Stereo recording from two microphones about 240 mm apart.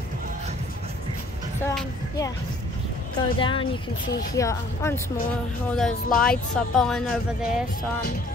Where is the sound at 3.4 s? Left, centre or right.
Left.